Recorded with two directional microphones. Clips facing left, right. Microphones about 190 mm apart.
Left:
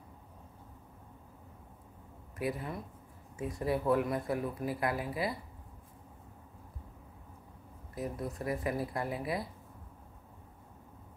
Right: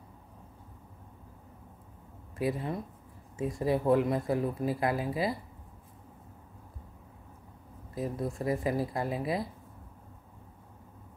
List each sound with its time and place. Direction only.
2.3 s speech: 25° right (ahead or behind)
7.9 s speech: 25° right (ahead or behind)